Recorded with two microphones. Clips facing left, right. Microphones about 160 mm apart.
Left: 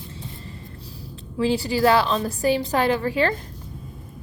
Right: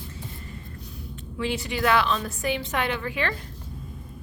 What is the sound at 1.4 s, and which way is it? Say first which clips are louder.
A woman's voice: left 7 dB; 35° left (ahead or behind).